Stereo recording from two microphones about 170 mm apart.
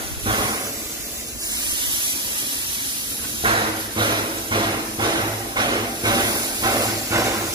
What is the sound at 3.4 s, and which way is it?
Hammer, 30° right (ahead or behind).